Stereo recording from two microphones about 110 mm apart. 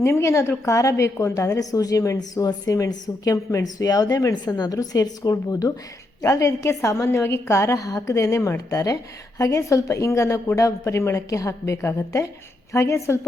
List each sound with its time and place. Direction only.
0.0 s a woman's voice: 25° left (ahead or behind)